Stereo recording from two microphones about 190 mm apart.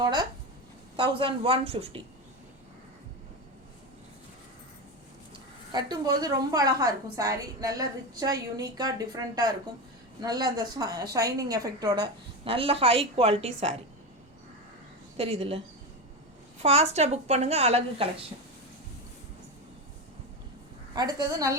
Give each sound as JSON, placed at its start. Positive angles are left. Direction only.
{"t": 0.0, "sound": "a woman's voice", "side_deg": -20}
{"t": 5.7, "sound": "a woman's voice", "side_deg": -20}
{"t": 15.2, "sound": "a woman's voice", "side_deg": -30}
{"t": 16.6, "sound": "a woman's voice", "side_deg": -35}
{"t": 20.9, "sound": "a woman's voice", "side_deg": -20}